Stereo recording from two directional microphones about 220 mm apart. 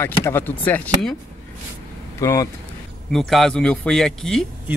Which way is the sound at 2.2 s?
15° left (ahead or behind).